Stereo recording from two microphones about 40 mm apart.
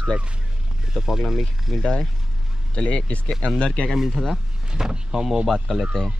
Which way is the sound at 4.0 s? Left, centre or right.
Centre.